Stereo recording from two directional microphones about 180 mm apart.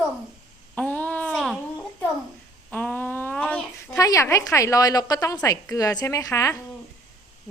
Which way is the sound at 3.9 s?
20° left (ahead or behind).